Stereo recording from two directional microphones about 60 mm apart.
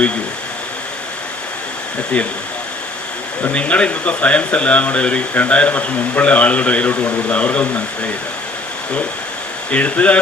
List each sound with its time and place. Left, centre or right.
2.2 s speech: left
3.4 s speech: left
9.7 s speech: left